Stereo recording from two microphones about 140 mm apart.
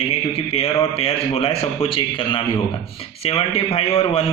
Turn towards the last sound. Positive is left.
turn(degrees=45)  # may be behind; listen again after turning